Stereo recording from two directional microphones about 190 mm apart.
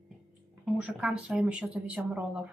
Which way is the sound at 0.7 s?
5° right (ahead or behind).